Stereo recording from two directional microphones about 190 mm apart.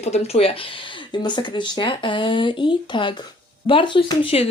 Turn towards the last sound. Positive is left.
turn(degrees=30)  # may be behind; listen again after turning